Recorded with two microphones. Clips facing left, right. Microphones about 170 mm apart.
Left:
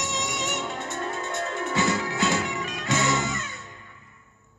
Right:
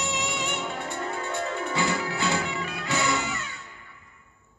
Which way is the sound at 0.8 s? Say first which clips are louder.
Even; 10° right (ahead or behind).